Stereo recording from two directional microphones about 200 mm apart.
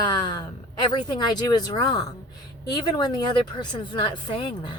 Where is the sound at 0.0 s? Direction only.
20° left (ahead or behind).